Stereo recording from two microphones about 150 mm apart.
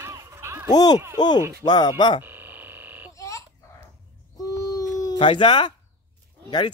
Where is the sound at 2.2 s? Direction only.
15° right (ahead or behind).